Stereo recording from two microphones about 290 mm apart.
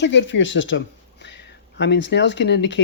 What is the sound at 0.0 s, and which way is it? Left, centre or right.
Speech, left.